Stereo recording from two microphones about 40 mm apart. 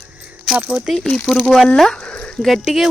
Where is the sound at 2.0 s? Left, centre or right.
Left.